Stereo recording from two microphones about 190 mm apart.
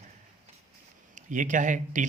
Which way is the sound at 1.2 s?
40° right (ahead or behind).